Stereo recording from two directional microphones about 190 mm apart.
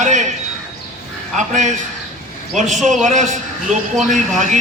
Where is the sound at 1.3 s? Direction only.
40° right (ahead or behind).